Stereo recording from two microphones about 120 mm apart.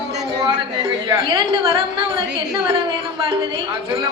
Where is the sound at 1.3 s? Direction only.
45° right (ahead or behind).